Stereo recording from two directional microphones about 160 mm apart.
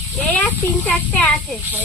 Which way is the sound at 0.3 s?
10° left (ahead or behind).